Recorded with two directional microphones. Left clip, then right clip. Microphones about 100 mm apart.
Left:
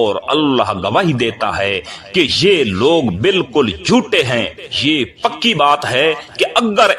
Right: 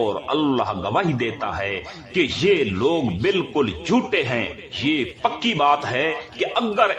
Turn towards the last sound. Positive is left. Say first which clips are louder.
# left 7 dB
turn(degrees=55)  # may be behind; listen again after turning